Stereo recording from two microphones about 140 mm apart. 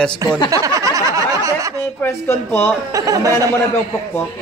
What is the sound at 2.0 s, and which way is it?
Speech, 15° left (ahead or behind).